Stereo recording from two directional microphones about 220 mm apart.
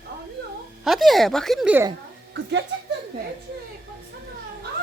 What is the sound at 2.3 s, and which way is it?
Speech, 55° right (ahead or behind).